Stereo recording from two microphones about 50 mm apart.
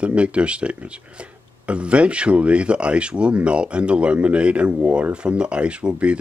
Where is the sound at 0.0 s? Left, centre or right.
Right.